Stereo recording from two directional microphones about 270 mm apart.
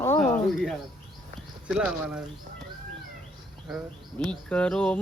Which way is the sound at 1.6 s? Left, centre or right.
Centre.